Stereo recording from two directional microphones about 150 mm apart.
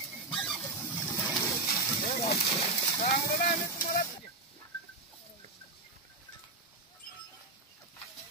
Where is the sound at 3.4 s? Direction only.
65° left (ahead or behind).